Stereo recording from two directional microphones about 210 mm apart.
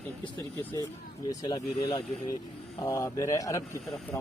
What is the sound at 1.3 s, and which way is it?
Speech, 20° left (ahead or behind).